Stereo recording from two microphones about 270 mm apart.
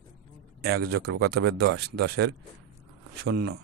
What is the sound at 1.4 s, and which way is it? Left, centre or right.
Speech, right.